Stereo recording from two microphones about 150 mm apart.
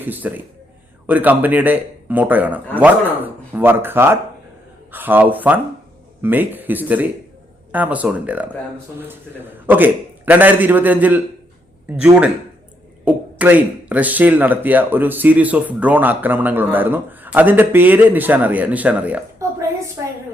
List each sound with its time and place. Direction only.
0.0 s speech: 10° right (ahead or behind)
13.1 s speech: 10° right (ahead or behind)
19.4 s a sound: 20° right (ahead or behind)